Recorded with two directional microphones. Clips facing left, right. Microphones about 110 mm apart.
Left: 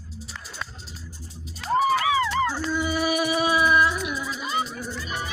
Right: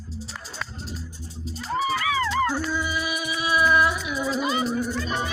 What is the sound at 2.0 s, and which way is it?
Music, 20° left (ahead or behind).